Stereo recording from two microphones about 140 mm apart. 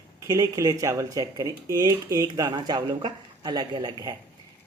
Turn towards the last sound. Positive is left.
turn(degrees=-30)  # may be behind; listen again after turning